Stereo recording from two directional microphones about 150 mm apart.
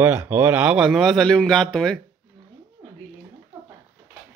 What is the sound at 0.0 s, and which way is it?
Speech, 15° right (ahead or behind).